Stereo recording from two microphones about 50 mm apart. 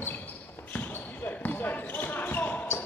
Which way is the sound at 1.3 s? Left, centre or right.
Left.